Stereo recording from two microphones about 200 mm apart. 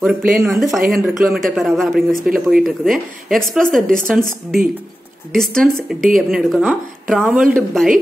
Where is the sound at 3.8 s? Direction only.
40° right (ahead or behind).